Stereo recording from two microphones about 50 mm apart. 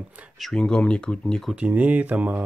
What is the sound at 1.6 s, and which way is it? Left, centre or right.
Speech, right.